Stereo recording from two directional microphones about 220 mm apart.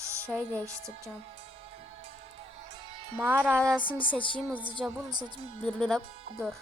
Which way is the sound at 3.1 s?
10° right (ahead or behind).